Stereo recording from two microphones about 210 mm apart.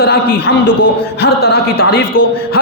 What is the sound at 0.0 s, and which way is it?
A man's voice, 50° left (ahead or behind).